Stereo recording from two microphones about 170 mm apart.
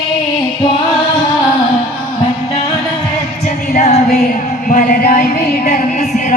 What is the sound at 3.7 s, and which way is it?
Music, 40° left (ahead or behind).